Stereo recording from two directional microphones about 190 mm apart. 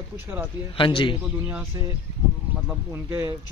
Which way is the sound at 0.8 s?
25° left (ahead or behind).